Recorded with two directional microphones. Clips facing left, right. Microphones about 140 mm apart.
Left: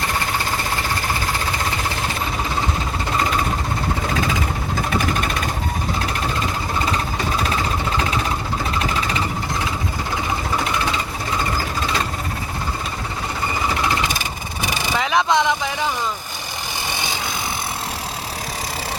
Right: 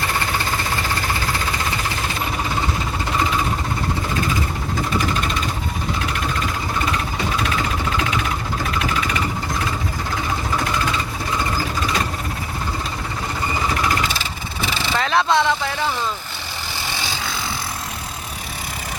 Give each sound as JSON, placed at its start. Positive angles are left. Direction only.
{"t": 14.1, "sound": "vehicle", "side_deg": 15}
{"t": 16.9, "sound": "vehicle", "side_deg": 20}